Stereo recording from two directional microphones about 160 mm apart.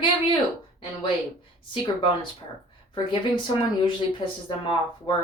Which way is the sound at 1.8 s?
30° left (ahead or behind).